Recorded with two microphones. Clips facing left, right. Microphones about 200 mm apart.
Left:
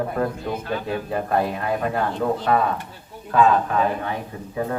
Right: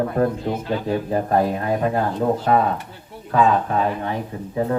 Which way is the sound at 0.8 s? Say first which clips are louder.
Right 4 dB; 35° right (ahead or behind).